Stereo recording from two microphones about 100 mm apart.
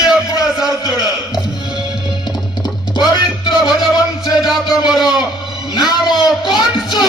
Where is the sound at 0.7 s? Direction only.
40° left (ahead or behind).